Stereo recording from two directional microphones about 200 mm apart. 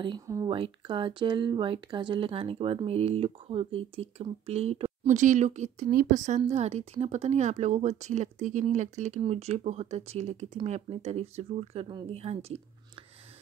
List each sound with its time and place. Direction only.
0.0 s speech: 20° right (ahead or behind)